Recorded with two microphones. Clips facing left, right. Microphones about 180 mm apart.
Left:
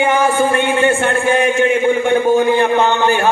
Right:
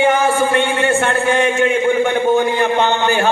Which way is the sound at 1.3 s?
25° right (ahead or behind).